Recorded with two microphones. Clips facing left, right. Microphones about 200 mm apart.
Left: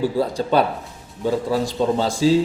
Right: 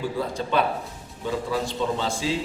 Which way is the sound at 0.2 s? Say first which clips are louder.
Left 4 dB; 35° left (ahead or behind).